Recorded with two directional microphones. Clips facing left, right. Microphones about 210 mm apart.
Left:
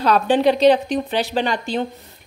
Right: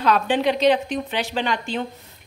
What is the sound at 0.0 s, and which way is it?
A woman's voice, 35° left (ahead or behind).